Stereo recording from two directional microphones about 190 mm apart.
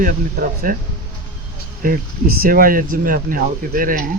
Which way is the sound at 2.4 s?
50° right (ahead or behind).